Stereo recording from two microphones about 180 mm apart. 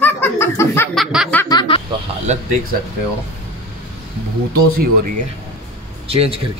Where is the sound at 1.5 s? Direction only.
25° left (ahead or behind).